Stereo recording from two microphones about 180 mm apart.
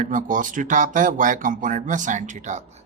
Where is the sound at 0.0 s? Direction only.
45° right (ahead or behind).